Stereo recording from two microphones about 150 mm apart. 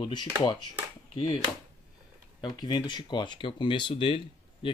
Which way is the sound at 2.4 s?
30° left (ahead or behind).